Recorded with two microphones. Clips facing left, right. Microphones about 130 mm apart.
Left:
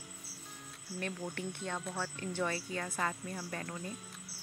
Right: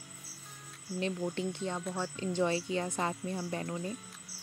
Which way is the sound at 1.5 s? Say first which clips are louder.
Right 4 dB; 15° right (ahead or behind).